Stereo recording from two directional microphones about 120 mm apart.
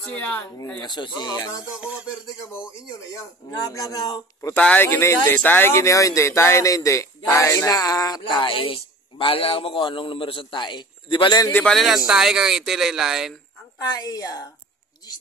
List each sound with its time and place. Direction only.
0.7 s speech: 35° left (ahead or behind)
1.8 s a sound: 10° right (ahead or behind)
3.6 s speech: 30° left (ahead or behind)
4.6 s speech: 10° left (ahead or behind)
4.8 s speech: 20° left (ahead or behind); by 11.4 s 45° left (ahead or behind)
11.5 s speech: 5° left (ahead or behind)
13.7 s speech: 30° left (ahead or behind)